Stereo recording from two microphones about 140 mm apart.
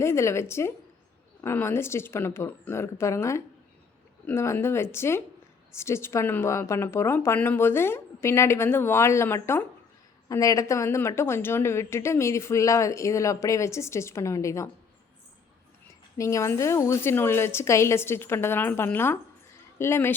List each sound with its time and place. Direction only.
0.0 s a woman's voice: 20° left (ahead or behind)
16.1 s speech: 20° left (ahead or behind)